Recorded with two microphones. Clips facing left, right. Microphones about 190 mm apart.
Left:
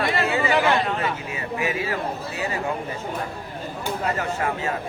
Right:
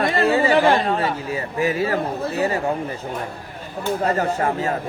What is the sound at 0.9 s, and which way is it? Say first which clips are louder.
Speech: right 4 dB; 35° right (ahead or behind).